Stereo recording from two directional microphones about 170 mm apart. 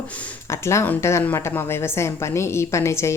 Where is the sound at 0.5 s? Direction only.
15° left (ahead or behind).